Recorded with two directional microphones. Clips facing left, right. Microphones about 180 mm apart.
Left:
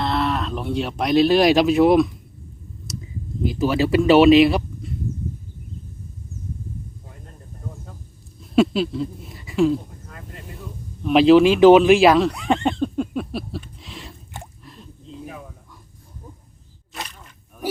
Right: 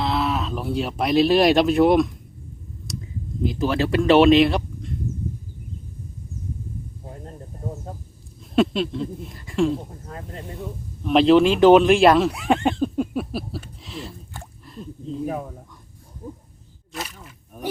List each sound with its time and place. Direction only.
0.0 s speech: centre (ahead or behind)
3.4 s speech: 5° left (ahead or behind)
8.4 s speech: centre (ahead or behind)
11.0 s speech: centre (ahead or behind)
13.7 s a sound: centre (ahead or behind)
15.3 s speech: 50° right (ahead or behind)
16.9 s a sound: 5° right (ahead or behind)